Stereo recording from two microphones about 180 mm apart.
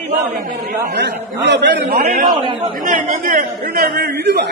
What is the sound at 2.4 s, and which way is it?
Speech, 30° right (ahead or behind).